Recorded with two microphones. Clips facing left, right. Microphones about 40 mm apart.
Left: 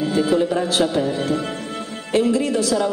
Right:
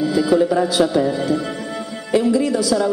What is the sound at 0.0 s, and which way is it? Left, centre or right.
Speech, left.